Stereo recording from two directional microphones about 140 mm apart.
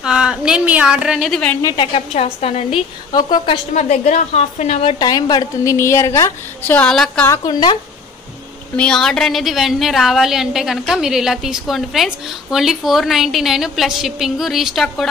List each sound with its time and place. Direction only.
0.0 s a woman's voice: 5° right (ahead or behind)
1.6 s a woman's voice: 25° left (ahead or behind)
2.1 s a woman's voice: 45° left (ahead or behind)
3.1 s a woman's voice: 30° left (ahead or behind)
3.7 s a woman's voice: 55° left (ahead or behind)
4.9 s a woman's voice: 30° left (ahead or behind)
6.7 s a woman's voice: 5° left (ahead or behind)
7.2 s a woman's voice: 30° left (ahead or behind)
8.7 s a woman's voice: 5° left (ahead or behind)